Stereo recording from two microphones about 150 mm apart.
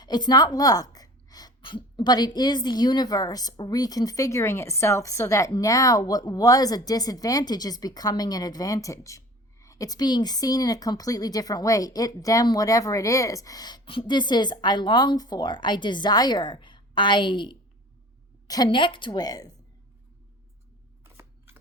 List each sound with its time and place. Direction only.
0.0 s speech: 30° left (ahead or behind)
21.0 s scissors: 15° right (ahead or behind)